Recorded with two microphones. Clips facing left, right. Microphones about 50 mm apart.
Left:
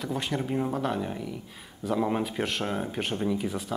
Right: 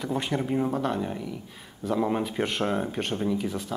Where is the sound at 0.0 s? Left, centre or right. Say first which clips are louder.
Right 2 dB; centre.